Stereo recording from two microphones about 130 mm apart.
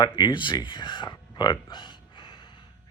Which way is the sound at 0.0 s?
35° left (ahead or behind).